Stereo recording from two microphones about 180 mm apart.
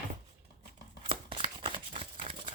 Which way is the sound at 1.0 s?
30° right (ahead or behind).